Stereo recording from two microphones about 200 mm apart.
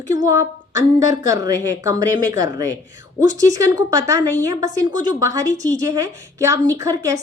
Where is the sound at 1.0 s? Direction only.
15° right (ahead or behind).